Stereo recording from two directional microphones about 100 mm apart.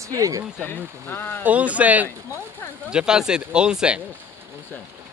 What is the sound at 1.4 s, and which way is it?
Speech, 15° right (ahead or behind).